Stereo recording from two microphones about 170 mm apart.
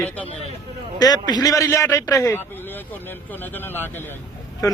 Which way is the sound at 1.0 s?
25° left (ahead or behind).